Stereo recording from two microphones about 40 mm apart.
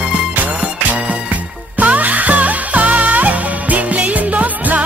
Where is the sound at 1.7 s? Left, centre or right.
Right.